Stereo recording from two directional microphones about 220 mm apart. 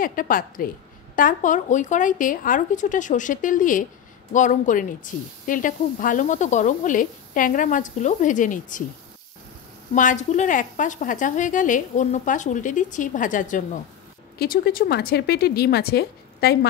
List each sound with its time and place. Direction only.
0.0 s a woman's voice: 40° left (ahead or behind)
9.9 s a woman's voice: 35° left (ahead or behind)